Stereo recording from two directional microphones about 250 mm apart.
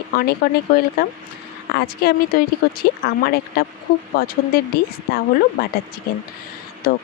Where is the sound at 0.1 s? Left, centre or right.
Left.